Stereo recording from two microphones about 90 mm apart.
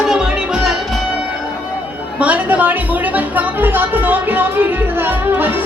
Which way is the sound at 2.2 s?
15° right (ahead or behind).